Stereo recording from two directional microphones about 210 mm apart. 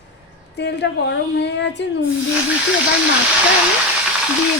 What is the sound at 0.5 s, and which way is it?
A woman's voice, 55° left (ahead or behind).